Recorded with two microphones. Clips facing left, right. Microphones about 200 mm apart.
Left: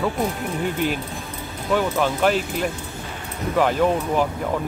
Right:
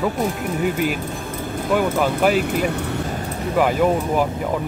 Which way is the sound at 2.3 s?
60° right (ahead or behind).